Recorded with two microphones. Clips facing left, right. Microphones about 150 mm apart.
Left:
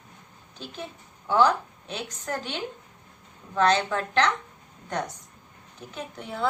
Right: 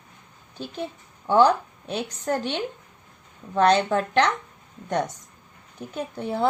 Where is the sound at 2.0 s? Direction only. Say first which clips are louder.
Right 6 dB; 35° right (ahead or behind).